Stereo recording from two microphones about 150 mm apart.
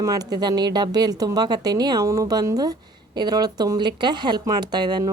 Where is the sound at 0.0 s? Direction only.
25° right (ahead or behind).